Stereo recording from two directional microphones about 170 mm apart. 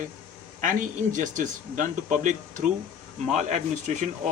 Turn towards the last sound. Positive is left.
turn(degrees=-50)  # may be behind; listen again after turning